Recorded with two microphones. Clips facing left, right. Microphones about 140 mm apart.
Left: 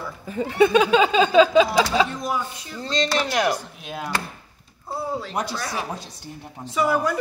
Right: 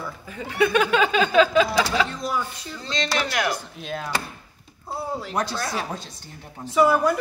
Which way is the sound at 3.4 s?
10° left (ahead or behind).